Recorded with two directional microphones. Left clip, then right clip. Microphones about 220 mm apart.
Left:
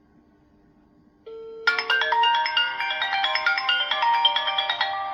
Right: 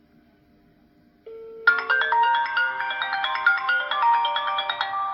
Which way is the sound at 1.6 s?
5° right (ahead or behind).